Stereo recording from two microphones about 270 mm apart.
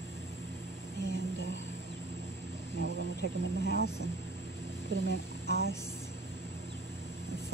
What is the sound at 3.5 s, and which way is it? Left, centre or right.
Speech, right.